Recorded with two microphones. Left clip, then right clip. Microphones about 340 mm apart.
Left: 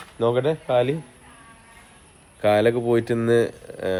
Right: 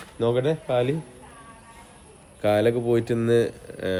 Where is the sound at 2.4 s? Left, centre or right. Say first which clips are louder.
Left 2 dB; centre.